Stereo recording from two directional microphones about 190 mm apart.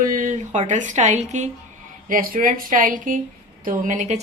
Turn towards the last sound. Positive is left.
turn(degrees=-40)  # may be behind; listen again after turning